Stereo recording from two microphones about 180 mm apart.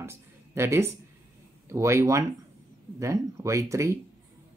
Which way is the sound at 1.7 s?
15° right (ahead or behind).